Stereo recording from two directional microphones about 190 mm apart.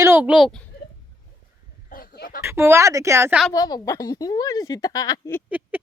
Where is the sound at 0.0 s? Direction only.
10° right (ahead or behind).